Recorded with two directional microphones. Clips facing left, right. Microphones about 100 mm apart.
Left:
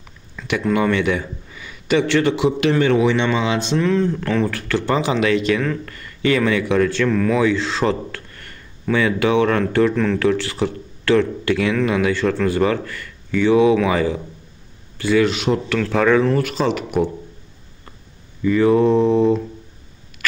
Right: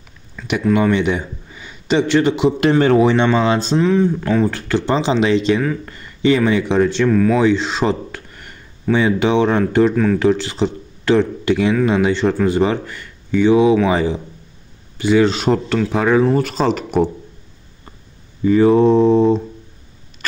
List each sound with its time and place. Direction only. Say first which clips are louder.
0.4 s a sound: right 2 dB; centre (ahead or behind)
0.7 s a man's voice: right 1 dB; 20° right (ahead or behind)
2.8 s speech: right 4 dB; 40° right (ahead or behind)
3.8 s speech: right 3 dB; 15° right (ahead or behind)
7.1 s speech: right 4 dB; 5° right (ahead or behind)
7.3 s a sound: right 3 dB; 20° right (ahead or behind)
8.9 s speech: right 2 dB; 20° right (ahead or behind)
15.2 s speech: right 3 dB; 40° right (ahead or behind)
15.8 s speech: left 1 dB; 15° right (ahead or behind)
16.3 s speech: right 2 dB; 35° right (ahead or behind)
18.4 s speech: right 3 dB; 30° right (ahead or behind)